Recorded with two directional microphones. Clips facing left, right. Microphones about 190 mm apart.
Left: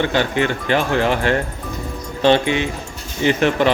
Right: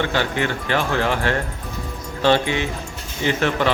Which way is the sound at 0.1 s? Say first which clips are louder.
Left 3 dB; 15° left (ahead or behind).